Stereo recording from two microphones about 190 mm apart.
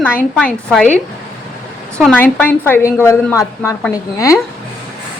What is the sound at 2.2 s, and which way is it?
A woman's voice, 10° left (ahead or behind).